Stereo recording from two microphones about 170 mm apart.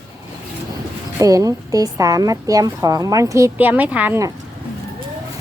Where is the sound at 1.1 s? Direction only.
20° right (ahead or behind).